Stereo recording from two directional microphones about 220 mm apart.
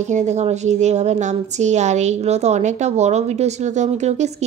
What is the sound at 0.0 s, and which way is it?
A woman's voice, 30° right (ahead or behind).